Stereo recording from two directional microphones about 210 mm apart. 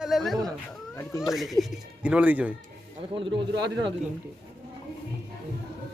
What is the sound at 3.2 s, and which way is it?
Speech, 25° right (ahead or behind).